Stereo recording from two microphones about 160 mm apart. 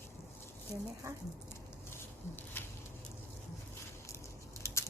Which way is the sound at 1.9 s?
15° left (ahead or behind).